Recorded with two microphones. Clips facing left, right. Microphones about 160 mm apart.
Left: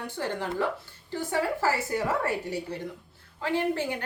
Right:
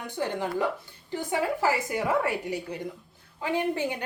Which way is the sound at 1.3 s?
15° right (ahead or behind).